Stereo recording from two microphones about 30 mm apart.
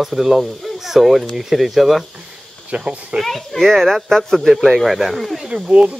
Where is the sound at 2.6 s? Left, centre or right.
Right.